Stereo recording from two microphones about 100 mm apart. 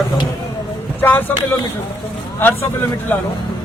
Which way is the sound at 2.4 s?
20° left (ahead or behind).